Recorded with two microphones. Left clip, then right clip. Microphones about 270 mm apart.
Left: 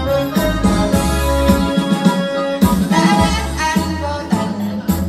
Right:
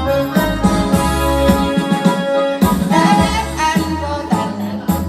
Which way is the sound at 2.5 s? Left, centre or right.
Right.